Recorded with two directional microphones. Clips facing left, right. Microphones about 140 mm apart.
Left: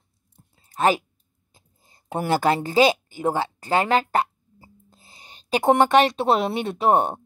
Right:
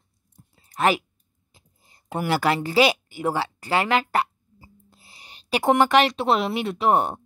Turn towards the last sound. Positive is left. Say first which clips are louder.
# left 1 dB
turn(degrees=30)  # may be behind; listen again after turning